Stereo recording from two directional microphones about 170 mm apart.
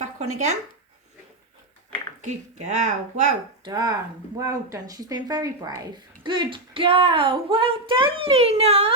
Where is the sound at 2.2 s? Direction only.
45° right (ahead or behind).